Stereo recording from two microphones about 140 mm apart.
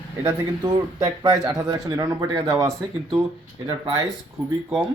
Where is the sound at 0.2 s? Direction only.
30° right (ahead or behind).